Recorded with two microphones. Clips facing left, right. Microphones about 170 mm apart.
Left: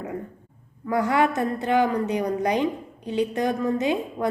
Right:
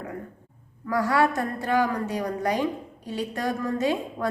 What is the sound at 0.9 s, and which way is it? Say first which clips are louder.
A woman's voice: left 1 dB; 20° left (ahead or behind).